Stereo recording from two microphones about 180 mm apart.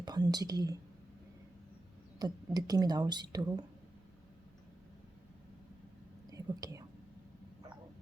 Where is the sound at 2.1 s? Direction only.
20° right (ahead or behind).